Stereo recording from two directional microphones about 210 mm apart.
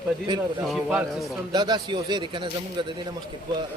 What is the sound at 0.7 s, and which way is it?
Speech, 5° right (ahead or behind).